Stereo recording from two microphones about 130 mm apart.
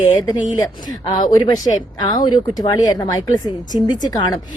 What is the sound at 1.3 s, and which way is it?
Speech, 30° left (ahead or behind).